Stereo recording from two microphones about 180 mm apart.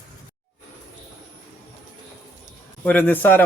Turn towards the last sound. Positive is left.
turn(degrees=10)  # may be behind; listen again after turning